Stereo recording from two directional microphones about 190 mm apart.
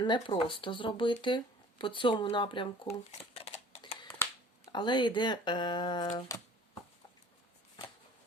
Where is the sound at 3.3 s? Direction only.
30° left (ahead or behind).